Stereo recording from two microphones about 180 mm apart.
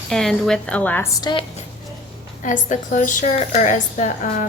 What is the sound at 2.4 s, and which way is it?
A woman's voice, 45° left (ahead or behind).